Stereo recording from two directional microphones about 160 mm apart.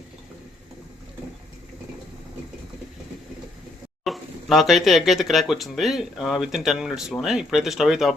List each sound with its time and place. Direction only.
4.0 s speech: centre (ahead or behind)